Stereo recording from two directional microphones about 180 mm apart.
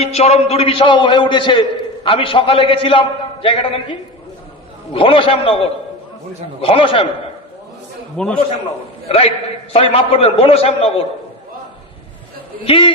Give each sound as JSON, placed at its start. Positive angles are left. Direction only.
{"t": 0.0, "sound": "a man's voice", "side_deg": 35}
{"t": 4.9, "sound": "a man's voice", "side_deg": 30}
{"t": 8.2, "sound": "a man's voice", "side_deg": 5}
{"t": 9.0, "sound": "a man's voice", "side_deg": 35}
{"t": 12.6, "sound": "a man's voice", "side_deg": 30}